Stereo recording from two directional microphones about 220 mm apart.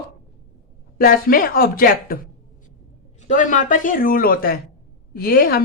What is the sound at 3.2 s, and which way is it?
Speech, 35° left (ahead or behind).